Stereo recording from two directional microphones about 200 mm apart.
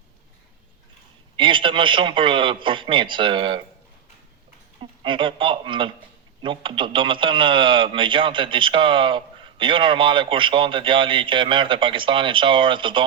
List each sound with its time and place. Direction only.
1.4 s speech: 25° right (ahead or behind)
4.8 s speech: 25° right (ahead or behind)